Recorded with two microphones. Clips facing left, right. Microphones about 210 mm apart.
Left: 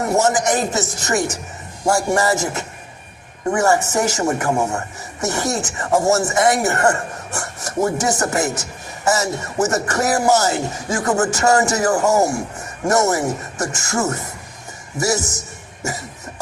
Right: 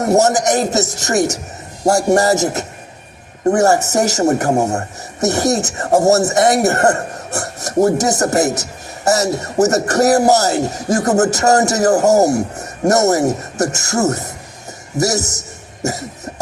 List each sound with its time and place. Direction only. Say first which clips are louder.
0.0 s speech: right 4 dB; 40° right (ahead or behind)
15.8 s cough: right 6 dB; 40° right (ahead or behind)